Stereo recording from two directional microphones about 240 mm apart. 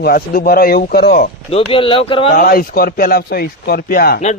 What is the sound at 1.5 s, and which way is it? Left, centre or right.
Speech, left.